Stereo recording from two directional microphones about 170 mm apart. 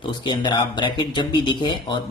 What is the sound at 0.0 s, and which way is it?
Speech, 25° left (ahead or behind).